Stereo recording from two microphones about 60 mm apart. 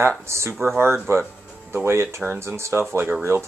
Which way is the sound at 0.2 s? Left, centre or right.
Right.